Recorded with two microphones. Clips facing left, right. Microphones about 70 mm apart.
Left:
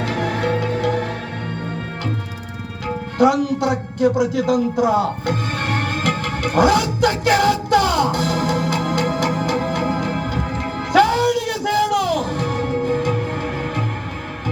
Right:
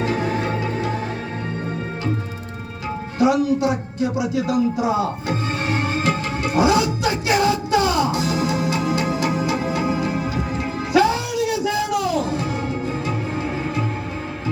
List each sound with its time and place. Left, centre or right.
0.0 s music: left
2.8 s music: left